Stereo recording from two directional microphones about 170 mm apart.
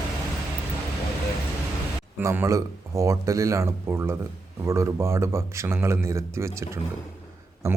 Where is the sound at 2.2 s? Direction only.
15° right (ahead or behind).